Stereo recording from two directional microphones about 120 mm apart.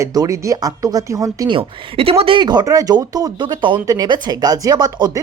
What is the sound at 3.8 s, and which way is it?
Speech, 30° right (ahead or behind).